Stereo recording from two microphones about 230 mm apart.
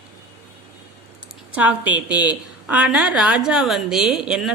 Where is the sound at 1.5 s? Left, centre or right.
Centre.